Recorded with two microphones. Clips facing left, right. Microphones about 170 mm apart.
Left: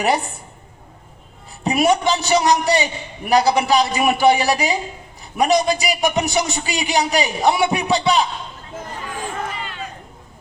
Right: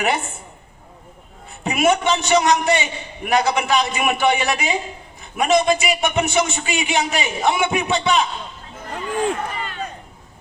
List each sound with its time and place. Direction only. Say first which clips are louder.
0.0 s a man's voice: left 2 dB; 35° left (ahead or behind)
1.6 s a man's voice: left 1 dB; 35° left (ahead or behind)
9.6 s a sound: right 2 dB; 45° right (ahead or behind)